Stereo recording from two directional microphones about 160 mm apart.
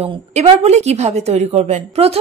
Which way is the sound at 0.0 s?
45° right (ahead or behind).